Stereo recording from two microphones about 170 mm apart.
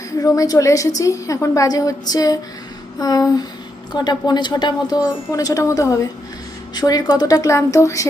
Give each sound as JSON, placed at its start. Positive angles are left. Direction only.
{"t": 0.2, "sound": "a woman's voice", "side_deg": 20}